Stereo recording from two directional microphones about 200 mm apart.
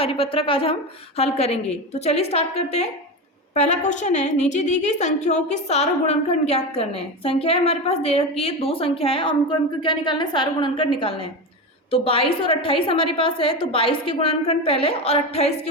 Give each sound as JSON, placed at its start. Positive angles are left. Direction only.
{"t": 0.0, "sound": "a woman's voice", "side_deg": 30}